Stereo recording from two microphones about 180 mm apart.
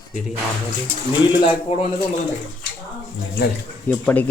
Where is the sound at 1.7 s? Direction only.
35° left (ahead or behind).